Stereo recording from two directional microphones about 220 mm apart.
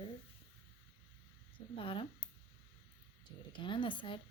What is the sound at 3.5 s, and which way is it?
Speech, 20° left (ahead or behind).